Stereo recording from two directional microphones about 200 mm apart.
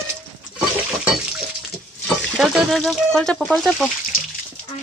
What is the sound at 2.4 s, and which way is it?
A woman's voice, centre (ahead or behind).